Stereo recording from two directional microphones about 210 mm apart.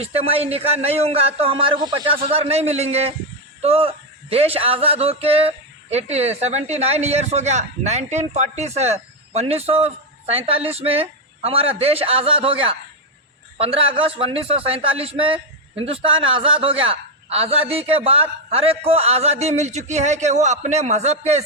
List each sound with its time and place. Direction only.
0.0 s speech: 30° right (ahead or behind)